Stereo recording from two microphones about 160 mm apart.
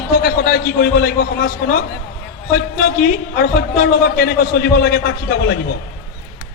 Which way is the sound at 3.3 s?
70° left (ahead or behind).